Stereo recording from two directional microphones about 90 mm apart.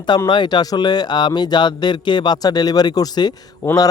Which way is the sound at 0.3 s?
55° left (ahead or behind).